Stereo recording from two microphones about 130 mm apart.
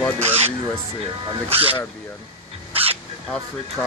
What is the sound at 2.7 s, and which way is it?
Dog, 50° right (ahead or behind).